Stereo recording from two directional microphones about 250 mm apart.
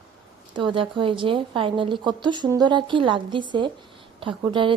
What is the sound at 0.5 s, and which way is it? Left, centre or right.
A woman's voice, centre.